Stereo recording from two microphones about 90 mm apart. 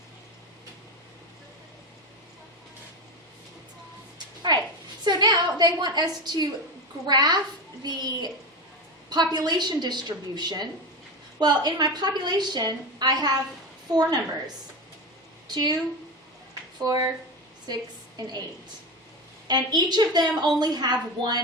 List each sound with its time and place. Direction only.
5.0 s a woman's voice: 55° right (ahead or behind)
15.5 s a woman's voice: 50° right (ahead or behind)
16.8 s a woman's voice: 45° right (ahead or behind)
18.2 s a woman's voice: 50° right (ahead or behind)
19.5 s a woman's voice: 50° right (ahead or behind)